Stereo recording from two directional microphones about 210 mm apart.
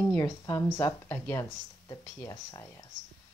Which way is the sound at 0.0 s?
15° left (ahead or behind).